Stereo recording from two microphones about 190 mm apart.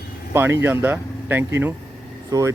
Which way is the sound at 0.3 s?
10° right (ahead or behind).